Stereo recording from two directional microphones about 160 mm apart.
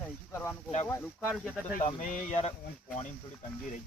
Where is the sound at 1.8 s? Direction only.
50° left (ahead or behind).